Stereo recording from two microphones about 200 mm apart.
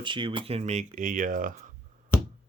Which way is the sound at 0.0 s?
25° right (ahead or behind).